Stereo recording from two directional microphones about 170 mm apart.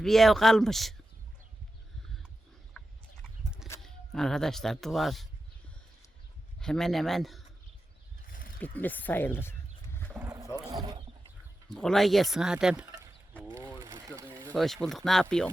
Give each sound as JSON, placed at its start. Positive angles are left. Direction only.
{"t": 0.0, "sound": "speech", "side_deg": 0}
{"t": 2.8, "sound": "chicken", "side_deg": 5}
{"t": 3.8, "sound": "speech", "side_deg": 5}
{"t": 6.6, "sound": "speech", "side_deg": 5}
{"t": 8.3, "sound": "wild animals", "side_deg": 55}
{"t": 8.5, "sound": "wild animals", "side_deg": 10}
{"t": 10.2, "sound": "boat", "side_deg": -15}
{"t": 10.7, "sound": "a sound", "side_deg": -25}
{"t": 11.7, "sound": "speech", "side_deg": 0}
{"t": 13.7, "sound": "a sound", "side_deg": -20}
{"t": 14.5, "sound": "speech", "side_deg": 0}